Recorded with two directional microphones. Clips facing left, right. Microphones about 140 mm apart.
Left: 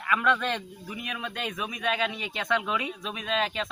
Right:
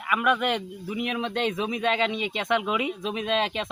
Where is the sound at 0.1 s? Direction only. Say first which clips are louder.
Right 2 dB; 10° right (ahead or behind).